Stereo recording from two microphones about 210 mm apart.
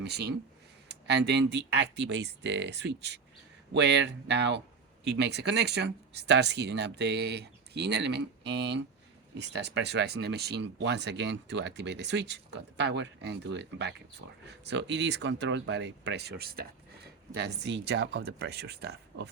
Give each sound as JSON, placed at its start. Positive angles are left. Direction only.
{"t": 0.0, "sound": "speech", "side_deg": -50}